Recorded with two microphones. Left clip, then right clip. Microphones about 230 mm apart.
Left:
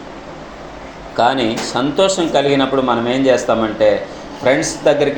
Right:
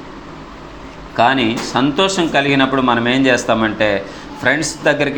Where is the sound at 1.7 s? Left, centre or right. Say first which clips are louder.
Left 1 dB; right.